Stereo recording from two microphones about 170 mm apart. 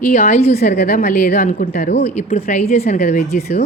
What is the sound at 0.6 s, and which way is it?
A woman's voice, 65° left (ahead or behind).